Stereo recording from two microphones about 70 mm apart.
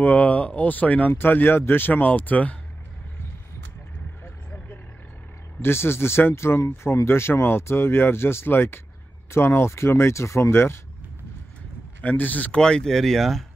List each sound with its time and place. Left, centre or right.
0.0 s speech: left
5.6 s speech: left
12.0 s speech: left
12.5 s speech: centre